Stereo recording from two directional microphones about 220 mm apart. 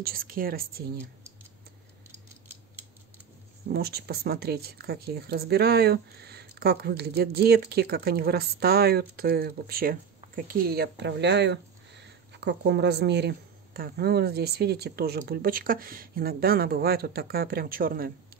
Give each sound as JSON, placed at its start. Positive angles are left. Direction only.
{"t": 0.0, "sound": "speech", "side_deg": -40}
{"t": 3.6, "sound": "speech", "side_deg": -45}